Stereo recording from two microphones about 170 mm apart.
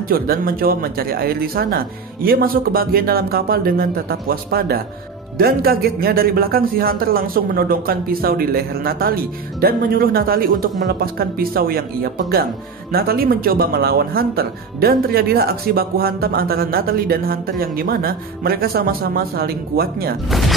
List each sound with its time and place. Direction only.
0.1 s a man's voice: 60° right (ahead or behind)
20.2 s speech: centre (ahead or behind)